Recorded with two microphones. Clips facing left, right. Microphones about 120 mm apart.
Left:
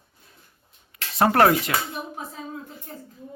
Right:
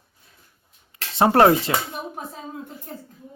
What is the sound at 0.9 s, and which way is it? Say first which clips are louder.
Speech: right 2 dB; 25° right (ahead or behind).